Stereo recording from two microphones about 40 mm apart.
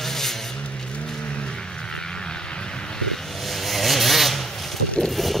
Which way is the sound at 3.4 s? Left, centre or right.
Centre.